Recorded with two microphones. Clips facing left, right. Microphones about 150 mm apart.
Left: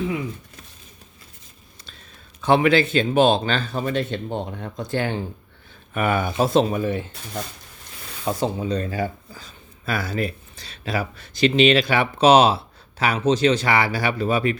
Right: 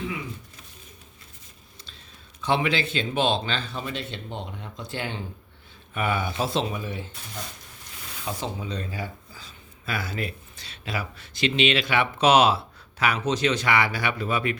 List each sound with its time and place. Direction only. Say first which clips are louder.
2.4 s speech: left 7 dB; 50° left (ahead or behind)
8.2 s speech: left 8 dB; 45° left (ahead or behind)